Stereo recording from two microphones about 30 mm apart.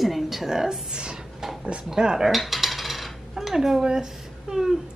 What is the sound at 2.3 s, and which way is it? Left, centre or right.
Coin, centre.